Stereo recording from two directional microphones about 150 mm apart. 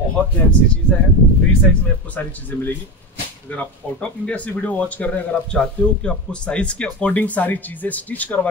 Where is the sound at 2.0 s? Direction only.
10° left (ahead or behind).